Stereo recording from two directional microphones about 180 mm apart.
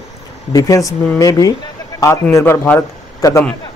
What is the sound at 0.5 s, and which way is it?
A man's voice, 20° left (ahead or behind).